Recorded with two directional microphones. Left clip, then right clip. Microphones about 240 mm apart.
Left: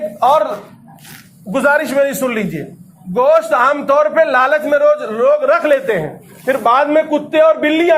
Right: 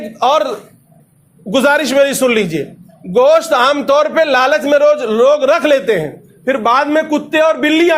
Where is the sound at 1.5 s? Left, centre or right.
Right.